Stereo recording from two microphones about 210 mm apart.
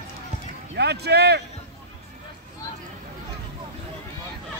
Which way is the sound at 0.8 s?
50° right (ahead or behind).